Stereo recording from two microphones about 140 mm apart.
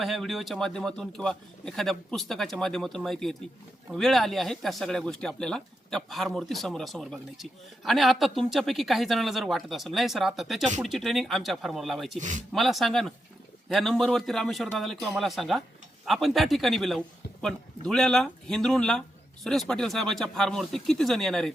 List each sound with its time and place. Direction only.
0.0 s speech: centre (ahead or behind)
12.2 s speech: 60° right (ahead or behind)
12.5 s speech: centre (ahead or behind)